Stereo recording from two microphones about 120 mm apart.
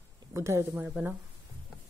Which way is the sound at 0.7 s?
10° right (ahead or behind).